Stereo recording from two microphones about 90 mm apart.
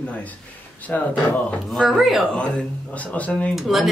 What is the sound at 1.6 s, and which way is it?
Speech, centre (ahead or behind).